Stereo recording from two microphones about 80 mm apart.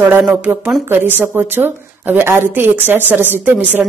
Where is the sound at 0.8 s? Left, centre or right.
Right.